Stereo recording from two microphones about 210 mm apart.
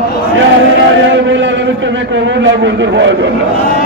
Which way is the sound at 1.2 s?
60° right (ahead or behind).